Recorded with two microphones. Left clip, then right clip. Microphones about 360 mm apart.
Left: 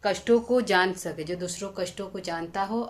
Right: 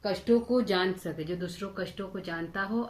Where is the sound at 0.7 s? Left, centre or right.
Centre.